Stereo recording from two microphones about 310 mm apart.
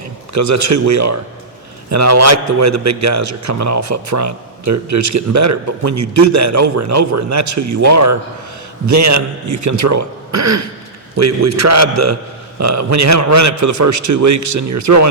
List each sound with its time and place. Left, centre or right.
0.3 s a man's voice: right